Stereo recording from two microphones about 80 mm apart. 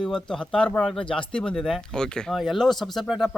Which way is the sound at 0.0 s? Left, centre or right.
Centre.